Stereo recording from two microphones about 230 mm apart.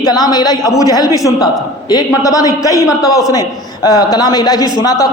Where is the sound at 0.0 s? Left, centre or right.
Centre.